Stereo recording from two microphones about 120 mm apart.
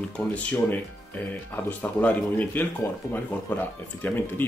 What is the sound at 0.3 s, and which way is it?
Speech, 10° left (ahead or behind).